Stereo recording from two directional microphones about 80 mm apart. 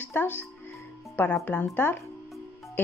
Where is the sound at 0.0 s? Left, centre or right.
Left.